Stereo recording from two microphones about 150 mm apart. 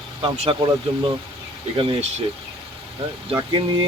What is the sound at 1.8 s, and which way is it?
Speech, 40° right (ahead or behind).